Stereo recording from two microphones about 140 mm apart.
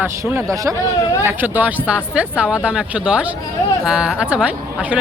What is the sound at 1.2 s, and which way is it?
Speech, 15° right (ahead or behind).